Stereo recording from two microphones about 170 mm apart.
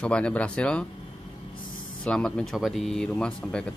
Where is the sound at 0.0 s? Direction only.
5° left (ahead or behind).